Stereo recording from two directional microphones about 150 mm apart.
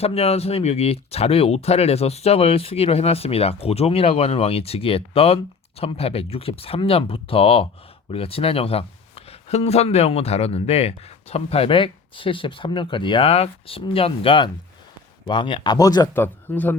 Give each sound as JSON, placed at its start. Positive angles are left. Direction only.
{"t": 0.0, "sound": "speech", "side_deg": 40}
{"t": 16.1, "sound": "speech", "side_deg": 15}